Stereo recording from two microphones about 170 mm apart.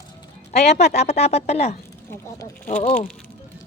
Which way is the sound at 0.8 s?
40° left (ahead or behind).